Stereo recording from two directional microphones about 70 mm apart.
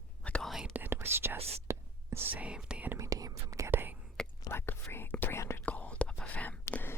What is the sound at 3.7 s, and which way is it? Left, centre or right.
Whispering, right.